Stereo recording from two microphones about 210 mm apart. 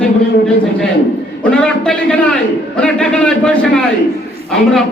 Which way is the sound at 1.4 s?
5° left (ahead or behind).